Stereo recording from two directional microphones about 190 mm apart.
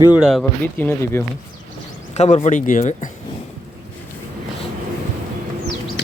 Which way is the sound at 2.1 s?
35° left (ahead or behind).